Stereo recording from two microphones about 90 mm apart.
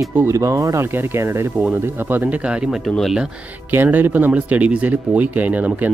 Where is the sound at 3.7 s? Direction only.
20° right (ahead or behind).